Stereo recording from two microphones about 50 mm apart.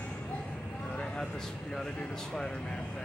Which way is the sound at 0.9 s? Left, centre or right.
Centre.